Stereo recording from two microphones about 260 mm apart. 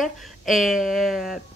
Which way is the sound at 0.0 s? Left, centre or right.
Centre.